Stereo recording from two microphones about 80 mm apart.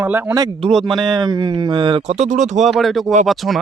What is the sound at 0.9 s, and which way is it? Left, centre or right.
Speech, right.